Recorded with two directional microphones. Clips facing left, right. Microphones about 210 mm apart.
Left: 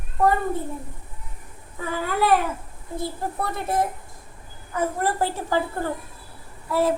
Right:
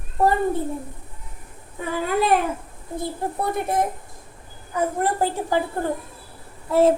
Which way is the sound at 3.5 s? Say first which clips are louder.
Right 1 dB; 15° right (ahead or behind).